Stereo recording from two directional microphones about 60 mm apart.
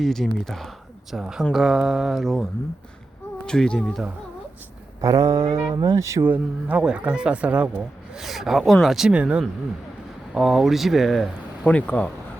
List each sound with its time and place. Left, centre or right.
0.0 s mantra: centre
1.1 s speech: centre
1.5 s mantra: centre
3.4 s speech: centre
4.9 s speech: right
6.2 s speech: right
8.2 s mantra: centre
9.0 s speech: centre
10.3 s mantra: centre
11.6 s speech: left